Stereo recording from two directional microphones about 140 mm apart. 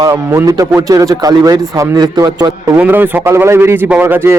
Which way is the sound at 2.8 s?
15° right (ahead or behind).